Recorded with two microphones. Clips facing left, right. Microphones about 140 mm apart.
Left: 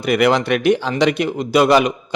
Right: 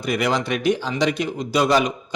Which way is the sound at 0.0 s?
65° left (ahead or behind).